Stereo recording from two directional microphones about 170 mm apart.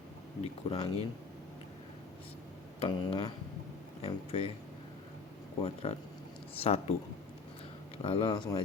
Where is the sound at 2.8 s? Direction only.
30° left (ahead or behind).